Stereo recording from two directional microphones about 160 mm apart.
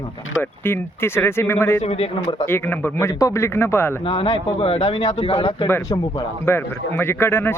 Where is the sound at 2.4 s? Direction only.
15° left (ahead or behind).